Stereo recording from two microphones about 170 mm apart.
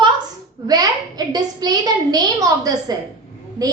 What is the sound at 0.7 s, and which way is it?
A child's voice, 20° right (ahead or behind).